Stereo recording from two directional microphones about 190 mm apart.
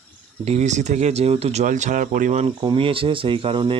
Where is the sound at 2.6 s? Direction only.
25° right (ahead or behind).